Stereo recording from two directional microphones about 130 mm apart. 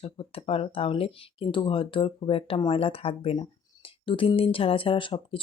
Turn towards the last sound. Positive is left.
turn(degrees=40)  # may be behind; listen again after turning